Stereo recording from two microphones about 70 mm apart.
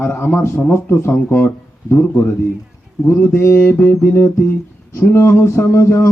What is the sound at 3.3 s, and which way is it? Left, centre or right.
Speech, left.